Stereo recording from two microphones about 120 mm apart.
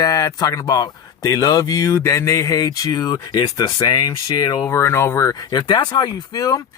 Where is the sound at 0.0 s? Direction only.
25° left (ahead or behind).